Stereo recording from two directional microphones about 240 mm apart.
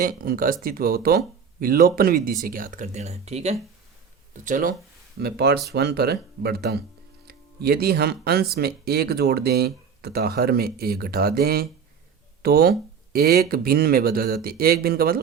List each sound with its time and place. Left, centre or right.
0.0 s speech: right